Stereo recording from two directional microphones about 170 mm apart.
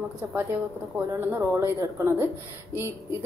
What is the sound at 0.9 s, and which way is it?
A woman's voice, 15° right (ahead or behind).